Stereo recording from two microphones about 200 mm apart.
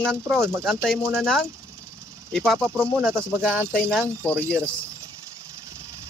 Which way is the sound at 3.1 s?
10° right (ahead or behind).